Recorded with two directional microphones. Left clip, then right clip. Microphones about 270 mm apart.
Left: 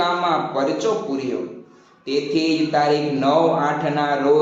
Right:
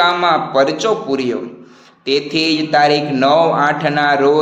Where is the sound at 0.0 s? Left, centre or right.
Right.